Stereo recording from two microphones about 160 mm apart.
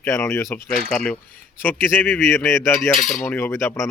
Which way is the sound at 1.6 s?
15° left (ahead or behind).